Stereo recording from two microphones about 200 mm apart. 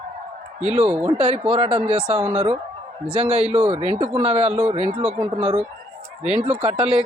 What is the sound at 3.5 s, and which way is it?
Speech, 30° right (ahead or behind).